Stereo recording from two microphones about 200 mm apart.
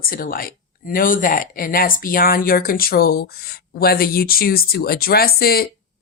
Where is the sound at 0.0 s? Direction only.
45° left (ahead or behind).